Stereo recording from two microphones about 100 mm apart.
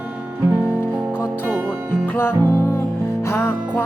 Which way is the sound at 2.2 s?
25° left (ahead or behind).